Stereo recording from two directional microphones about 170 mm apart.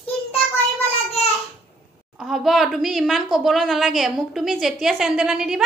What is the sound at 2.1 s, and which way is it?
A woman's voice, centre (ahead or behind).